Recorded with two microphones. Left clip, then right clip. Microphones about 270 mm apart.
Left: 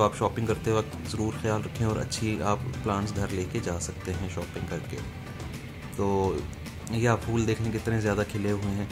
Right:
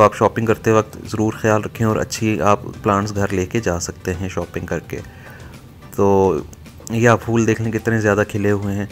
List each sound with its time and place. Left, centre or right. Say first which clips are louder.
0.0 s speech: right 12 dB; centre
5.9 s speech: right 13 dB; centre